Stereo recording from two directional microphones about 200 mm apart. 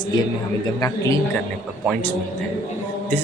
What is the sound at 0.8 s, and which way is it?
A man's voice, 15° left (ahead or behind).